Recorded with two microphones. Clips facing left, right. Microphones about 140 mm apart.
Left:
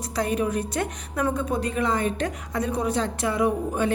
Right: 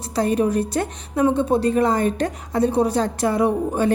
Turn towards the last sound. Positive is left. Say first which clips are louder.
# right 4 dB
turn(degrees=-35)  # may be behind; listen again after turning